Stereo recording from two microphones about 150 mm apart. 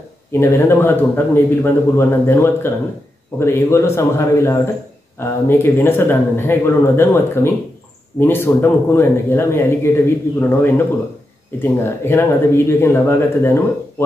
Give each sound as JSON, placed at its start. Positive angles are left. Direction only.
{"t": 0.3, "sound": "a man's voice", "side_deg": 15}
{"t": 11.6, "sound": "a man's voice", "side_deg": 15}